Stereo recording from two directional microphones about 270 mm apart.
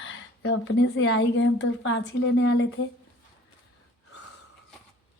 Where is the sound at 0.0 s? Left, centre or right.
Left.